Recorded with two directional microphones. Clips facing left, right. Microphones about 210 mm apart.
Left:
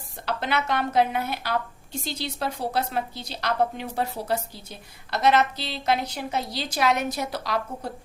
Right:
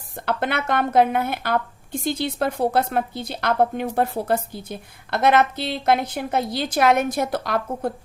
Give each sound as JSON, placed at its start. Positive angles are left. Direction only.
{"t": 0.3, "sound": "a woman's voice", "side_deg": -55}